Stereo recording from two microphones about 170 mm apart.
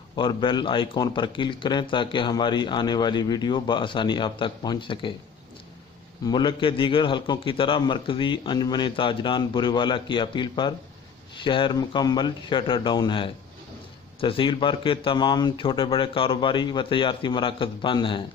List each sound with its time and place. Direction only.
0.2 s a man's voice: 25° left (ahead or behind)
6.2 s a man's voice: 25° left (ahead or behind)